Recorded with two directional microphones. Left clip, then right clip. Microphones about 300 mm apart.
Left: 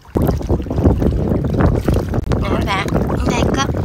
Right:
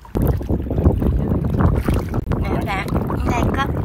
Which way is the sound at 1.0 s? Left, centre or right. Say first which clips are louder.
Left 4 dB; left.